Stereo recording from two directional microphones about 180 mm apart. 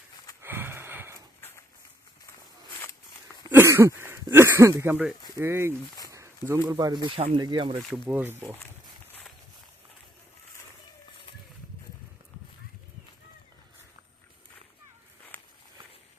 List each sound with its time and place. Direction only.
0.4 s sniff: 10° right (ahead or behind)
3.5 s speech: 15° right (ahead or behind)
6.1 s a sound: 15° right (ahead or behind)
6.7 s speech: 20° right (ahead or behind)
7.8 s speech: centre (ahead or behind)
15.3 s walk: 10° left (ahead or behind)